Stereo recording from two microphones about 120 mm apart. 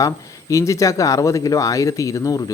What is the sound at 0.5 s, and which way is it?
Speech, 25° left (ahead or behind).